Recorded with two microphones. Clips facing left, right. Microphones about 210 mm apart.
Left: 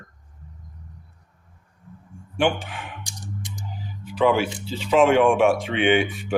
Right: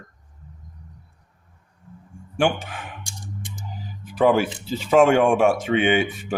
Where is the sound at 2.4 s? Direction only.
45° right (ahead or behind).